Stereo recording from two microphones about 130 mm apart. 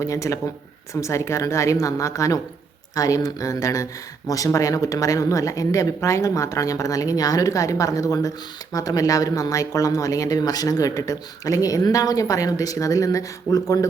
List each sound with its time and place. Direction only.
0.0 s speech: 25° left (ahead or behind)